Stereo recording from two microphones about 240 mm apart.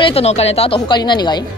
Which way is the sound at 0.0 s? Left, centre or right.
Left.